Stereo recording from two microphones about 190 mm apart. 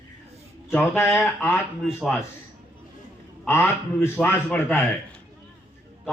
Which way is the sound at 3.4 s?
10° left (ahead or behind).